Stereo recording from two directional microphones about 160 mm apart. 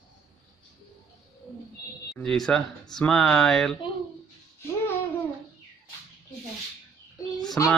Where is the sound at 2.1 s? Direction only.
5° left (ahead or behind).